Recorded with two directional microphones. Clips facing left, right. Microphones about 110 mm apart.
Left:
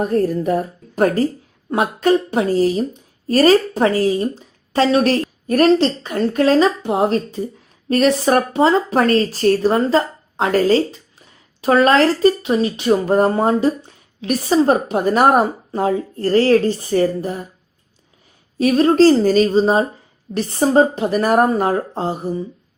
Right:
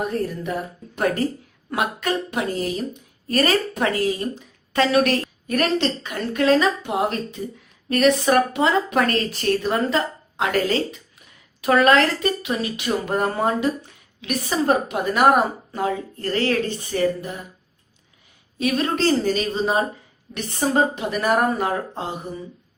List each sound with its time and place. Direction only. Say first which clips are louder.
0.0 s speech: left 8 dB; 40° left (ahead or behind)
18.6 s speech: left 9 dB; 35° left (ahead or behind)